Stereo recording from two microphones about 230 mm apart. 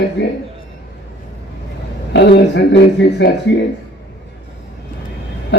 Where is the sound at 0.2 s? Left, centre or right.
Left.